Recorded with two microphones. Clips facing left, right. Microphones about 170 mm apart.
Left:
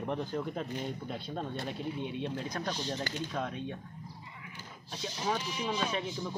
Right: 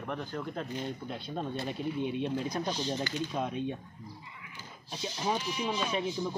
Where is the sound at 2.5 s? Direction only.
20° right (ahead or behind).